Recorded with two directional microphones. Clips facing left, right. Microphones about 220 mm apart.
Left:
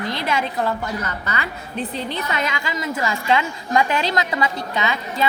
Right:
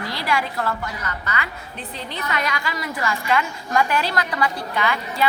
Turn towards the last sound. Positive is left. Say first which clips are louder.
# even
turn(degrees=20)  # may be behind; listen again after turning